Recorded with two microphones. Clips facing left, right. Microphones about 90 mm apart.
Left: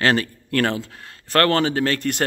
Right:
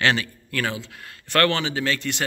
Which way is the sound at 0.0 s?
45° left (ahead or behind).